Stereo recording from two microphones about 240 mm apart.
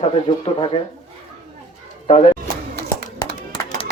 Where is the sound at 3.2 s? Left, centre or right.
Centre.